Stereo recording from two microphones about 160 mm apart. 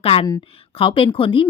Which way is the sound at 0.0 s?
40° left (ahead or behind).